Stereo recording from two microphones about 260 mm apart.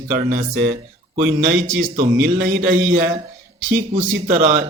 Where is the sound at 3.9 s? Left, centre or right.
Right.